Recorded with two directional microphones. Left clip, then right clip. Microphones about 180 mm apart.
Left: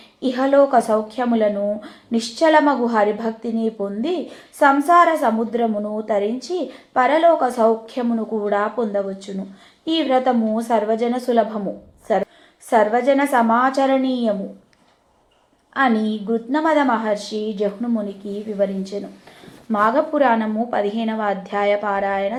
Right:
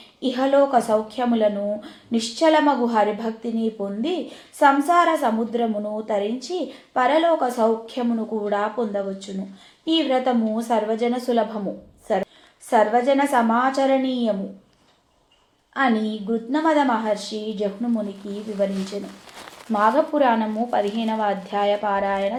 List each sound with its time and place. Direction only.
0.2 s a woman's voice: 30° left (ahead or behind)
12.7 s a woman's voice: 35° left (ahead or behind)
15.7 s a woman's voice: 30° left (ahead or behind)